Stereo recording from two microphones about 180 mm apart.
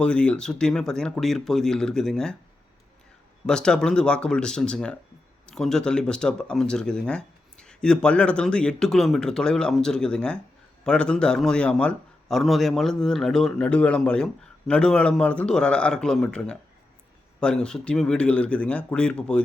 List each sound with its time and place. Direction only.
0.0 s speech: 5° left (ahead or behind)
3.4 s a man's voice: 5° left (ahead or behind)